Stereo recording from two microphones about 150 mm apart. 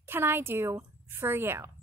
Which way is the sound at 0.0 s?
15° right (ahead or behind).